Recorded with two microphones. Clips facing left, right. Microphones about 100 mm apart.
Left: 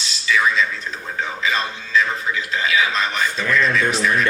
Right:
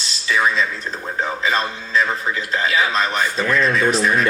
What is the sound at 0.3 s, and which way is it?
A man's voice, 35° right (ahead or behind).